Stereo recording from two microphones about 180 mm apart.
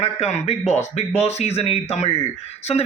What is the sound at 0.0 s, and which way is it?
A man's voice, 40° left (ahead or behind).